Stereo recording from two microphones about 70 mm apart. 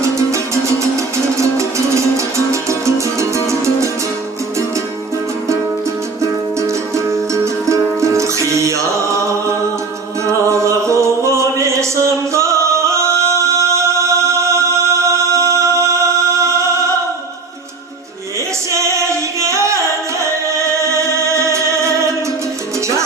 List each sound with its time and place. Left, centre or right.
0.3 s music: right
6.6 s music: right
10.2 s music: right
18.7 s music: right